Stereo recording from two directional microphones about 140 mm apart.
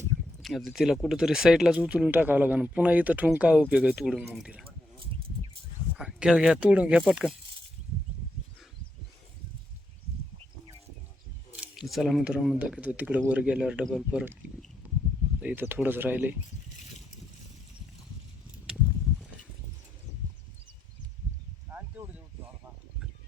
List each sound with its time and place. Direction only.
0.4 s speech: centre (ahead or behind)
6.0 s speech: 5° right (ahead or behind)
7.2 s speech: 5° left (ahead or behind)
11.5 s speech: 5° right (ahead or behind)
15.4 s speech: 10° right (ahead or behind)
21.7 s a sound: 15° right (ahead or behind)